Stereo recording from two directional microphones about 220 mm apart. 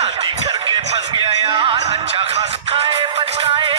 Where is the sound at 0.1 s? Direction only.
25° right (ahead or behind).